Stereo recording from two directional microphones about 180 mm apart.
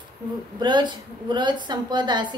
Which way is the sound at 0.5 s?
25° right (ahead or behind).